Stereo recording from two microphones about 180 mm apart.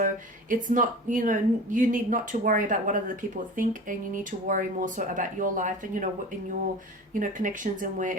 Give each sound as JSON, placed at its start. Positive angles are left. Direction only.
{"t": 0.5, "sound": "speech", "side_deg": -50}
{"t": 7.1, "sound": "speech", "side_deg": -50}